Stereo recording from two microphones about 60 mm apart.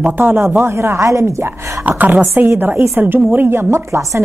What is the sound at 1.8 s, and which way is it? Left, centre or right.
Speech, right.